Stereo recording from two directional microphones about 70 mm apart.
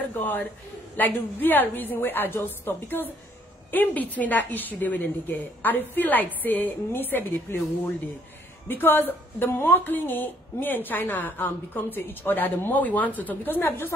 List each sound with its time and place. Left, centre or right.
0.1 s a man's voice: left